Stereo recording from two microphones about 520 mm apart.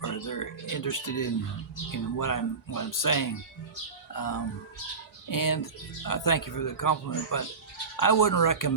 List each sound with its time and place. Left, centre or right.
0.0 s speech: left